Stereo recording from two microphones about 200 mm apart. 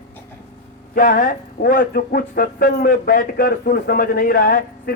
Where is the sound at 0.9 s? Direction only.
45° left (ahead or behind).